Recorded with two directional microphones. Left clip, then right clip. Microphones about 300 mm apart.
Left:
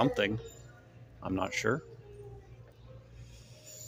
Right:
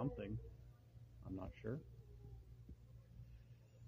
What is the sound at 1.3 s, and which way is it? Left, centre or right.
Speech, centre.